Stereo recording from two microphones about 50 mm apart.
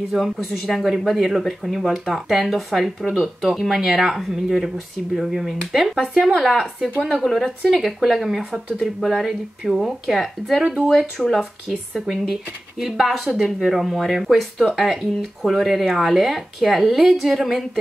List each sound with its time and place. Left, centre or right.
0.1 s speech: centre
10.6 s speech: centre
11.1 s speech: centre
12.7 s speech: centre